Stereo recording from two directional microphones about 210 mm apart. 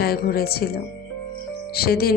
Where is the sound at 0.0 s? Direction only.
45° left (ahead or behind).